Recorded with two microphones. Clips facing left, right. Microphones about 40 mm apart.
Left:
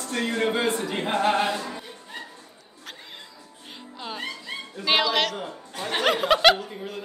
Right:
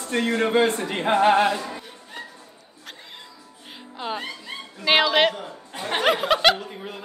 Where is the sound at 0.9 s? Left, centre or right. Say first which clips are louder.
Right 7 dB; right.